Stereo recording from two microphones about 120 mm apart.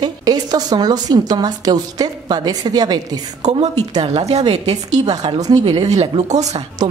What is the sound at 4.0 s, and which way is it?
A woman's voice, 65° right (ahead or behind).